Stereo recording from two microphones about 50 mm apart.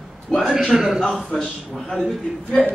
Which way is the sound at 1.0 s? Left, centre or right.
Centre.